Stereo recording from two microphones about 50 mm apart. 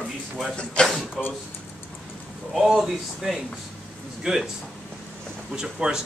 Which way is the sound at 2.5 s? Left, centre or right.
Centre.